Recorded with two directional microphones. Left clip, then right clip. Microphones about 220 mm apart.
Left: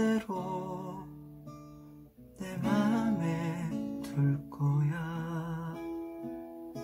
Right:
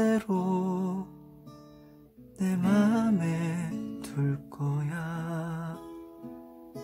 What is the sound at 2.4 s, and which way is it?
Music, 45° right (ahead or behind).